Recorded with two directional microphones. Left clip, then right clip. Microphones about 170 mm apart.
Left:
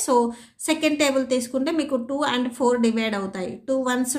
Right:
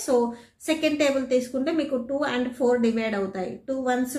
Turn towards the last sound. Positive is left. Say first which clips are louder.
# left 2 dB
turn(degrees=35)  # may be behind; listen again after turning